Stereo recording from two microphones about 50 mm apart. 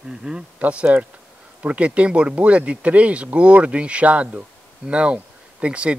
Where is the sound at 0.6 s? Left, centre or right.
Right.